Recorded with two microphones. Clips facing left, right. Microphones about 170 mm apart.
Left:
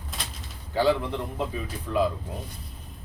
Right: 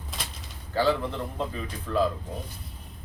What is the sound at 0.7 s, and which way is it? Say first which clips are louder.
Speech: left 2 dB; 15° left (ahead or behind).